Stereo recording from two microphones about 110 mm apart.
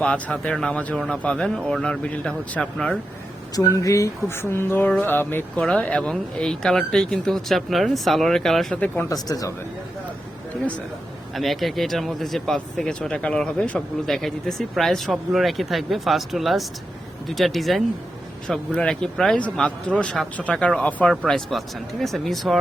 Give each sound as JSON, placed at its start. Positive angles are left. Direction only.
{"t": 0.0, "sound": "speech", "side_deg": 10}
{"t": 3.5, "sound": "speech", "side_deg": 30}
{"t": 5.6, "sound": "speech", "side_deg": 10}
{"t": 9.0, "sound": "speech", "side_deg": 35}
{"t": 11.3, "sound": "speech", "side_deg": 0}